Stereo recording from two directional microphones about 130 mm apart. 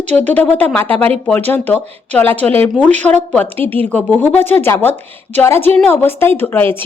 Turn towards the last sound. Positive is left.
turn(degrees=15)  # may be behind; listen again after turning